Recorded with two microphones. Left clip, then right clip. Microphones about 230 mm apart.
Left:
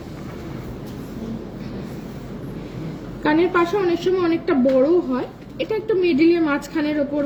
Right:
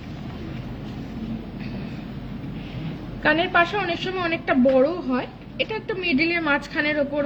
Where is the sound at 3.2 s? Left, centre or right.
Right.